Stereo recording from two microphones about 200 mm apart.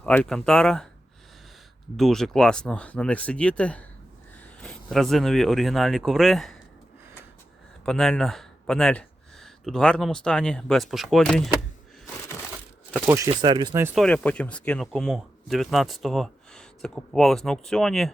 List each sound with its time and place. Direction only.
0.0 s speech: 5° left (ahead or behind)
2.0 s speech: centre (ahead or behind)
7.9 s speech: 5° left (ahead or behind)
12.9 s speech: 15° right (ahead or behind)
13.9 s speech: centre (ahead or behind)